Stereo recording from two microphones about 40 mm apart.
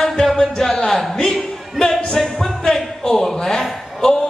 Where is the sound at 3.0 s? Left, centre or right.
Centre.